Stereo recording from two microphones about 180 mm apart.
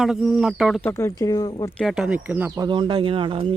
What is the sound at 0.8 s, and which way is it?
Speech, 15° left (ahead or behind).